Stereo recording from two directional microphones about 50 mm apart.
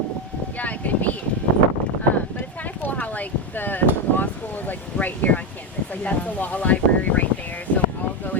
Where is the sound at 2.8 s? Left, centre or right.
Left.